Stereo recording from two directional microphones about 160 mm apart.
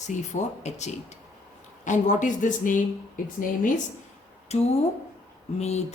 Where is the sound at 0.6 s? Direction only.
45° left (ahead or behind).